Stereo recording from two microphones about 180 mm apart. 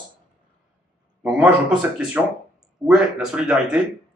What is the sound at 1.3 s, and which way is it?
Speech, 5° right (ahead or behind).